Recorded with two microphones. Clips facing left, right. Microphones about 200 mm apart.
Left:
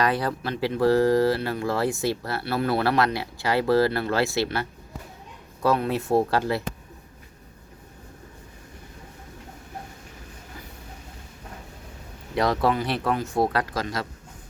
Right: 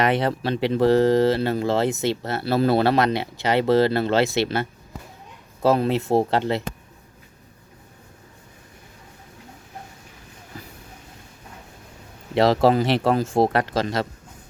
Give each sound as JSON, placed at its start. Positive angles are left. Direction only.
{"t": 0.0, "sound": "speech", "side_deg": -25}
{"t": 5.6, "sound": "speech", "side_deg": -25}
{"t": 12.6, "sound": "speech", "side_deg": -30}